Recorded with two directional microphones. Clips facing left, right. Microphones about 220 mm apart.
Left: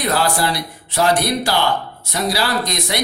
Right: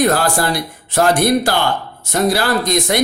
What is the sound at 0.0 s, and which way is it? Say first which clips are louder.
Speech: right 4 dB; 50° right (ahead or behind).